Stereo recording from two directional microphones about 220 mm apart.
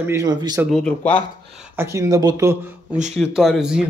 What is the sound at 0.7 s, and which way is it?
Speech, 5° left (ahead or behind).